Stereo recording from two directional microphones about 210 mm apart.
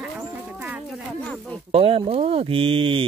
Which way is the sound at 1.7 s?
25° right (ahead or behind).